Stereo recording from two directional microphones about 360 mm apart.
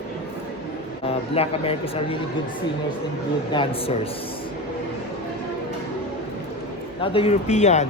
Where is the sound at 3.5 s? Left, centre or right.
Centre.